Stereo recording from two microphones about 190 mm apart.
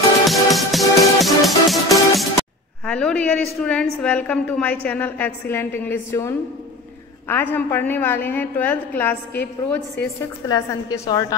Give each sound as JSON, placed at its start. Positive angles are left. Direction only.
{"t": 0.3, "sound": "music", "side_deg": 0}
{"t": 2.8, "sound": "a woman's voice", "side_deg": 5}
{"t": 10.5, "sound": "a woman's voice", "side_deg": 20}